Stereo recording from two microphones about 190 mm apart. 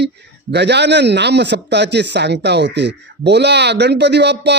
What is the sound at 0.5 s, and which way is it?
A man's voice, 65° right (ahead or behind).